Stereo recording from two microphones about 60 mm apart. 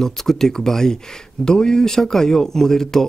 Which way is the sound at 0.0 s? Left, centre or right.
Centre.